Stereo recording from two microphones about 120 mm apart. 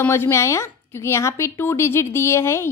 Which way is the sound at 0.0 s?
20° left (ahead or behind).